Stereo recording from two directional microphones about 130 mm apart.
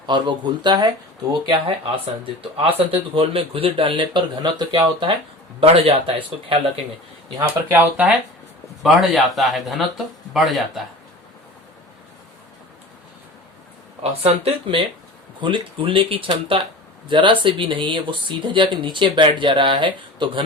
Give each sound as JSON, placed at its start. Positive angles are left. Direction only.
{"t": 0.0, "sound": "speech", "side_deg": -35}
{"t": 7.3, "sound": "speech", "side_deg": -15}
{"t": 8.8, "sound": "speech", "side_deg": 0}
{"t": 14.0, "sound": "speech", "side_deg": -50}